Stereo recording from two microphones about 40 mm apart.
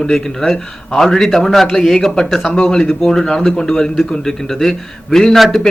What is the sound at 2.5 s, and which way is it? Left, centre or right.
A man's voice, centre.